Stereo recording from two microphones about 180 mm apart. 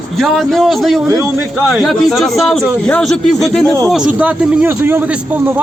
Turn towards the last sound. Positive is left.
turn(degrees=-10)  # may be behind; listen again after turning